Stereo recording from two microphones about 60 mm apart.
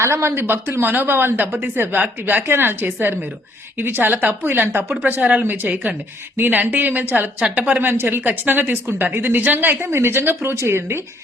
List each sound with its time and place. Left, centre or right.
0.0 s a woman's voice: right